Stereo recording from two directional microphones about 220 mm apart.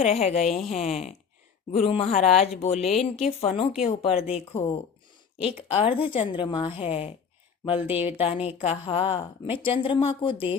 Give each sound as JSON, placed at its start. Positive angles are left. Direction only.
{"t": 0.3, "sound": "a woman's voice", "side_deg": 0}
{"t": 0.8, "sound": "a woman's voice", "side_deg": 30}
{"t": 2.9, "sound": "a woman's voice", "side_deg": 0}
{"t": 3.2, "sound": "a woman's voice", "side_deg": 25}
{"t": 7.9, "sound": "speech", "side_deg": -5}
{"t": 8.2, "sound": "a woman's voice", "side_deg": 25}